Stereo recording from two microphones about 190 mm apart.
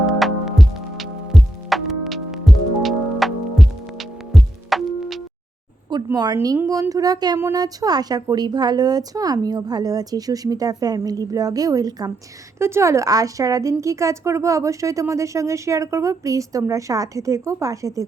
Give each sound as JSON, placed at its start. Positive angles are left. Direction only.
{"t": 0.0, "sound": "music", "side_deg": 0}
{"t": 6.1, "sound": "a woman's voice", "side_deg": -20}